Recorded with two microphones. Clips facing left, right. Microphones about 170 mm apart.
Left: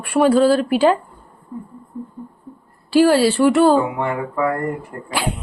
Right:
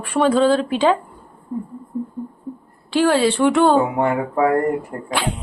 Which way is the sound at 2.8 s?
10° left (ahead or behind).